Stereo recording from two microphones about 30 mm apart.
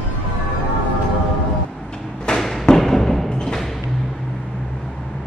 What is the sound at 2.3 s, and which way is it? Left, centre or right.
Thump, left.